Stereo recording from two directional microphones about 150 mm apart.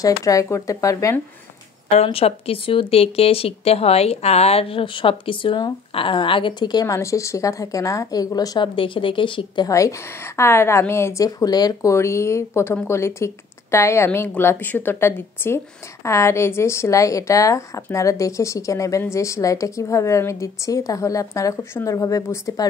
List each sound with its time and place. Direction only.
0.0 s a woman's voice: 20° left (ahead or behind)
2.0 s speech: 40° left (ahead or behind)
9.7 s a woman's voice: 20° left (ahead or behind)